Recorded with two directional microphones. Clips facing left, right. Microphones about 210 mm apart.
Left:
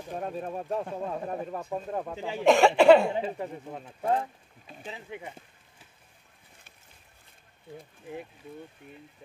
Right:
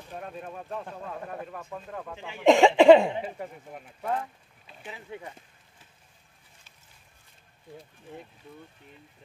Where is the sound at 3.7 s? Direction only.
30° left (ahead or behind).